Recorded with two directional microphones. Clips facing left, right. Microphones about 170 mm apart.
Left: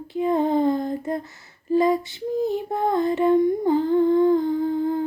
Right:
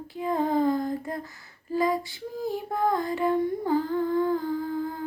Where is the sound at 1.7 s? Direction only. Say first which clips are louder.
Left 6 dB; 25° left (ahead or behind).